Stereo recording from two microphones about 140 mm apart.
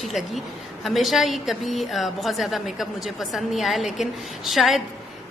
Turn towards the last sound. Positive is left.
turn(degrees=0)  # may be behind; listen again after turning